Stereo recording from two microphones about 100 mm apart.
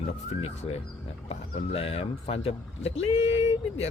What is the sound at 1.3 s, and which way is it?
Speech, 75° left (ahead or behind).